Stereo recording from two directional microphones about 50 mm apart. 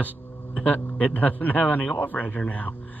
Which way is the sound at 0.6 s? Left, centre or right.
Left.